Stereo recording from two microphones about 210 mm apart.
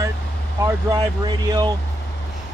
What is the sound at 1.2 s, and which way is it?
Speech, 20° right (ahead or behind).